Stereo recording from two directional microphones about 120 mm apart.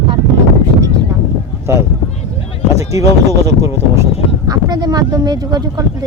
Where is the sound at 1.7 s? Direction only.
25° right (ahead or behind).